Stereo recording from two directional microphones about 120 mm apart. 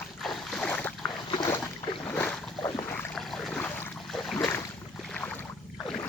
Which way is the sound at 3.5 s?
15° left (ahead or behind).